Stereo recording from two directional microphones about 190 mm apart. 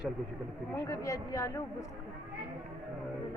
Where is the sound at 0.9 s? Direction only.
15° left (ahead or behind).